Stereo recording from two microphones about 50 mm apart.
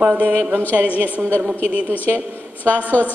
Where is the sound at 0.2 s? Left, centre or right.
Right.